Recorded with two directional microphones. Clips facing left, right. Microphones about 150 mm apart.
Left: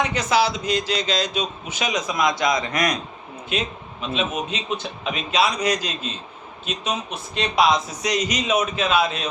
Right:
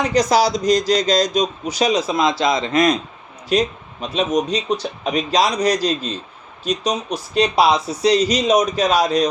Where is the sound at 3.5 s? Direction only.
40° right (ahead or behind).